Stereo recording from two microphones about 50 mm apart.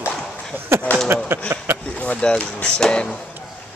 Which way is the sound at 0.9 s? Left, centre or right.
Left.